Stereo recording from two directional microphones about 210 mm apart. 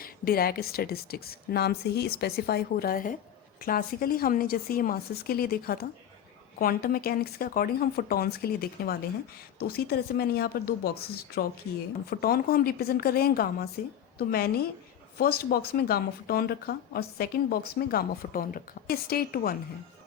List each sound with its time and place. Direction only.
0.0 s speech: 45° left (ahead or behind)